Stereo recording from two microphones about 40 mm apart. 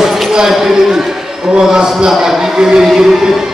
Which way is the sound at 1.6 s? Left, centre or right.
Centre.